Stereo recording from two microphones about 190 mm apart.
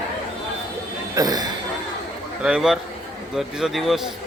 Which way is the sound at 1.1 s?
20° right (ahead or behind).